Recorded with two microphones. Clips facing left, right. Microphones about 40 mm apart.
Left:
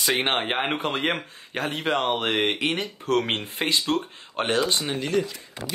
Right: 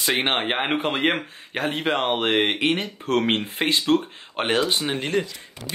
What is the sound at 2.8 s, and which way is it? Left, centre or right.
Speech, right.